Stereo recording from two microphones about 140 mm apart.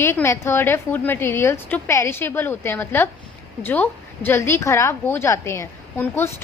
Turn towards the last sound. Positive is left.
turn(degrees=15)  # may be behind; listen again after turning